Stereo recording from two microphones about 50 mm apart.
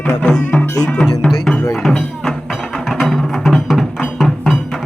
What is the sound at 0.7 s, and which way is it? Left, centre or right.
Music, left.